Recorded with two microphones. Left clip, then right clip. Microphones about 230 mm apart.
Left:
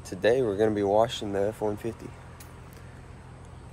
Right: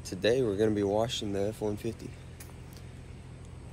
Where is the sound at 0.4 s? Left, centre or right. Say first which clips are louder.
Left 3 dB; left.